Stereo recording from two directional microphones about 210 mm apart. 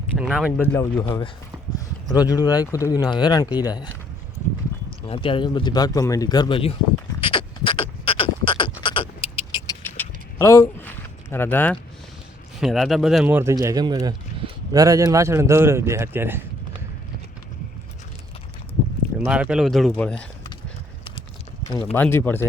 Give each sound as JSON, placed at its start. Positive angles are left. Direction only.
{"t": 0.2, "sound": "speech", "side_deg": -5}
{"t": 0.6, "sound": "speech", "side_deg": 10}
{"t": 5.0, "sound": "speech", "side_deg": 25}
{"t": 7.2, "sound": "a sound", "side_deg": 25}
{"t": 8.8, "sound": "vehicle", "side_deg": 25}
{"t": 9.8, "sound": "a sound", "side_deg": 10}
{"t": 11.3, "sound": "speech", "side_deg": 10}
{"t": 19.2, "sound": "speech", "side_deg": -5}
{"t": 21.9, "sound": "speech", "side_deg": 10}